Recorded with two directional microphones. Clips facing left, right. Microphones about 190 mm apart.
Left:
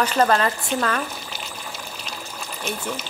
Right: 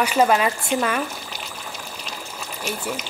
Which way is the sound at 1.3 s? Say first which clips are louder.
Even; centre (ahead or behind).